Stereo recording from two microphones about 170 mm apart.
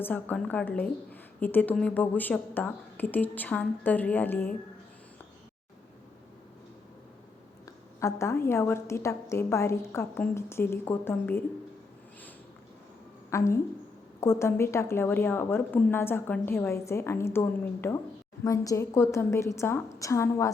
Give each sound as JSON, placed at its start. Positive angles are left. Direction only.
{"t": 0.0, "sound": "a woman's voice", "side_deg": 10}
{"t": 7.6, "sound": "a woman's voice", "side_deg": 15}
{"t": 13.3, "sound": "a woman's voice", "side_deg": 15}